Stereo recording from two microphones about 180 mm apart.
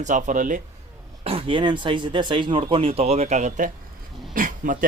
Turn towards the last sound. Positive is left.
turn(degrees=-50)  # may be behind; listen again after turning